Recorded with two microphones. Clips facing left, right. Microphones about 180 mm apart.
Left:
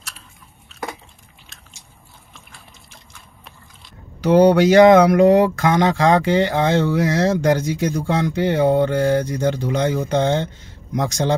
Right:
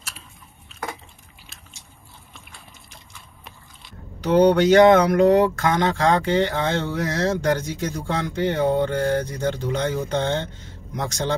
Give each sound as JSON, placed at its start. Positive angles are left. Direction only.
{"t": 2.9, "sound": "liquid", "side_deg": 0}
{"t": 4.4, "sound": "speech", "side_deg": 10}